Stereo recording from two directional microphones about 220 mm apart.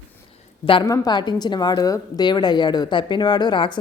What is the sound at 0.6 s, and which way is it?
A woman's voice, 20° left (ahead or behind).